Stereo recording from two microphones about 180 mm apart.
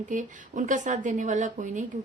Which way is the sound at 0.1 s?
45° right (ahead or behind).